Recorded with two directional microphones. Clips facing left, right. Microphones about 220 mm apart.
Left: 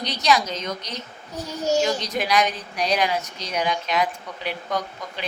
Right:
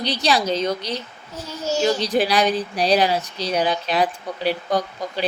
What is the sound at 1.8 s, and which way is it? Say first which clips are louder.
Speech: right 5 dB; 30° right (ahead or behind).